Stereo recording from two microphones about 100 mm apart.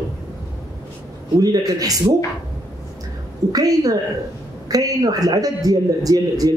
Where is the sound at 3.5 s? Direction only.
40° right (ahead or behind).